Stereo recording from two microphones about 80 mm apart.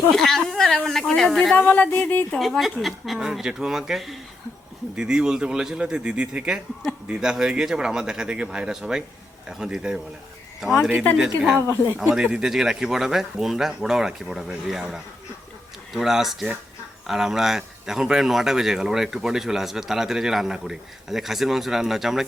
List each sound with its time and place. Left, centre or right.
0.1 s a sound: centre
0.9 s speech: centre
1.5 s speech: centre
2.4 s a man's voice: centre
11.2 s a man's voice: centre